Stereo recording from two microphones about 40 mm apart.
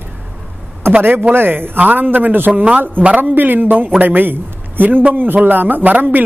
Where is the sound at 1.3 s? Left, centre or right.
Right.